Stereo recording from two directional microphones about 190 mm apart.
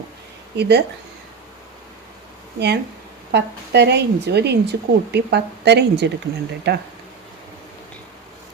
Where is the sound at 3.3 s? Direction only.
65° right (ahead or behind).